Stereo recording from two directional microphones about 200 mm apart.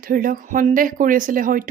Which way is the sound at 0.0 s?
45° right (ahead or behind).